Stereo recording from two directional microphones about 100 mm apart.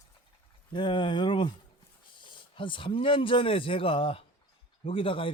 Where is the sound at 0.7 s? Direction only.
50° left (ahead or behind).